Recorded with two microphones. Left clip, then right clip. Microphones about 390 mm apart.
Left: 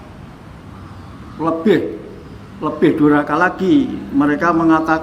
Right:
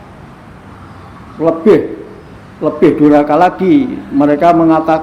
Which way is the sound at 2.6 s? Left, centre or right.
Left.